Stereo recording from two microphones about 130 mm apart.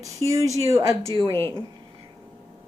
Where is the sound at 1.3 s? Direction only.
20° left (ahead or behind).